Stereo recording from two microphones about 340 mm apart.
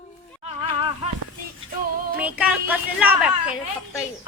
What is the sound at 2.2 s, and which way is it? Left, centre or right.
Speech, centre.